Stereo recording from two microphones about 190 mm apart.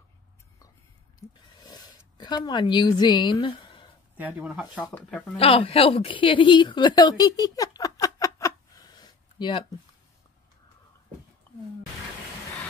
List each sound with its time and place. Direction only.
1.2 s a sound: 15° left (ahead or behind)
4.2 s speech: 10° right (ahead or behind)
4.9 s speech: 10° left (ahead or behind)
5.4 s a woman's voice: 30° left (ahead or behind)